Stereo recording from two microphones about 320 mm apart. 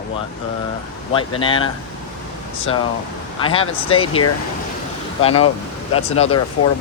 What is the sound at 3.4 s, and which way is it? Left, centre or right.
Speech, centre.